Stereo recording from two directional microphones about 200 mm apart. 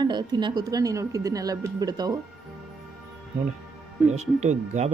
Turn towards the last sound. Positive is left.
turn(degrees=-35)  # may be behind; listen again after turning